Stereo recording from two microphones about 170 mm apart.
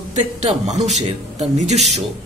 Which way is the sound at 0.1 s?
40° right (ahead or behind).